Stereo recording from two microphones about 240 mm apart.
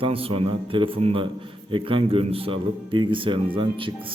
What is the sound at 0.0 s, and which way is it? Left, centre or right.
Speech, right.